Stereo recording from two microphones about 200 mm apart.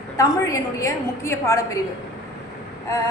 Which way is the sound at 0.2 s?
15° left (ahead or behind).